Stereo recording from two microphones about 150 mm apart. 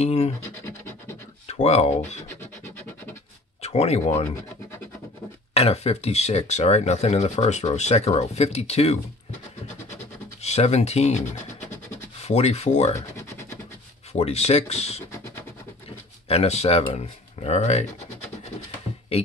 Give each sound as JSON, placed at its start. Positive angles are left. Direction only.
{"t": 0.0, "sound": "speech", "side_deg": 45}
{"t": 1.5, "sound": "speech", "side_deg": 45}
{"t": 2.2, "sound": "scratch", "side_deg": 15}
{"t": 3.6, "sound": "speech", "side_deg": 45}
{"t": 5.5, "sound": "speech", "side_deg": 40}
{"t": 10.4, "sound": "speech", "side_deg": 45}
{"t": 12.9, "sound": "rub", "side_deg": 20}
{"t": 14.1, "sound": "speech", "side_deg": 45}
{"t": 15.0, "sound": "scratch", "side_deg": 15}
{"t": 16.3, "sound": "speech", "side_deg": 45}
{"t": 19.1, "sound": "speech", "side_deg": 40}